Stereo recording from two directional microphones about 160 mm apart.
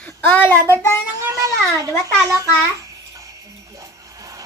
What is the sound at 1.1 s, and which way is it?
Speech, 20° right (ahead or behind).